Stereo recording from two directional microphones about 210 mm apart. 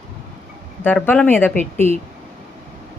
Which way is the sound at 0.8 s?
10° left (ahead or behind).